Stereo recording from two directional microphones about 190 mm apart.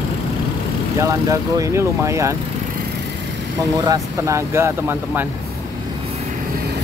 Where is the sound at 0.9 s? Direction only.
15° right (ahead or behind).